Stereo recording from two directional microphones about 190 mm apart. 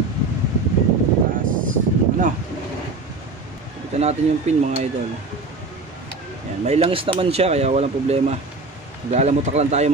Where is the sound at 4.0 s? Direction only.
35° right (ahead or behind).